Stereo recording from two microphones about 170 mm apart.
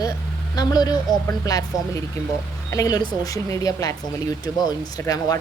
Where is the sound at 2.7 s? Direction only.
20° left (ahead or behind).